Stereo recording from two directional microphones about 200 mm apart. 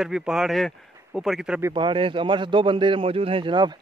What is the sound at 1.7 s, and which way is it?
Speech, 25° right (ahead or behind).